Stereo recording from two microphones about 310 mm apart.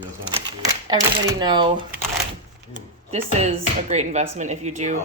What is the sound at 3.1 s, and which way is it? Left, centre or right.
Speech, centre.